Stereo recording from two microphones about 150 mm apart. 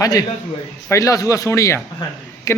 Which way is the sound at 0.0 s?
25° left (ahead or behind).